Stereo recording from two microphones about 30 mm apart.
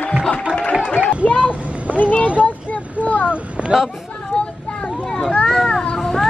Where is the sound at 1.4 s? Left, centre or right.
Right.